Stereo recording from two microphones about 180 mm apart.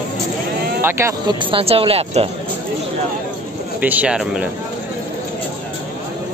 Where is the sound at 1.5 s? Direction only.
30° right (ahead or behind).